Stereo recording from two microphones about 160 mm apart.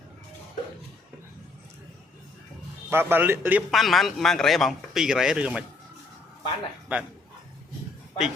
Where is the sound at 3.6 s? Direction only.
Centre (ahead or behind).